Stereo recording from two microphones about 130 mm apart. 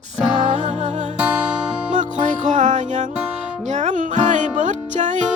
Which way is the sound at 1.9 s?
70° right (ahead or behind).